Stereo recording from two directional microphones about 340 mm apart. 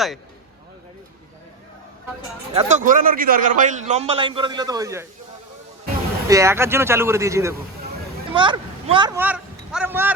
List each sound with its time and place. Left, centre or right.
2.6 s a man's voice: right
6.2 s speech: centre